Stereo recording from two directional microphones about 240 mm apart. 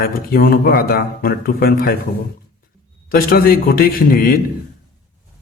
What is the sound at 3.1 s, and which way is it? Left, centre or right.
A man's voice, left.